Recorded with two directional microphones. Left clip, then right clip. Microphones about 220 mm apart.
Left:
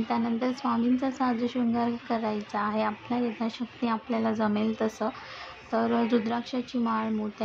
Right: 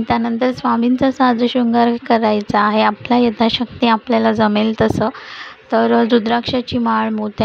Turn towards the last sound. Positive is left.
turn(degrees=-35)  # may be behind; listen again after turning